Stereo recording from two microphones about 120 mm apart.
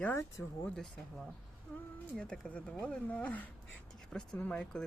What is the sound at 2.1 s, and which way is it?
Speech, 10° left (ahead or behind).